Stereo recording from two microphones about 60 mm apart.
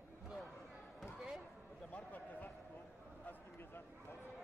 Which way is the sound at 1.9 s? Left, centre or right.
Left.